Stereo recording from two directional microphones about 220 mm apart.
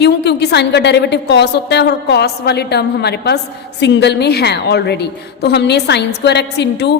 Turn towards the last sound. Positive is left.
turn(degrees=50)  # may be behind; listen again after turning